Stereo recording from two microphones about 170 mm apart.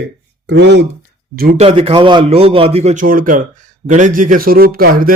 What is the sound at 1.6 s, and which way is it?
A man's voice, 35° right (ahead or behind).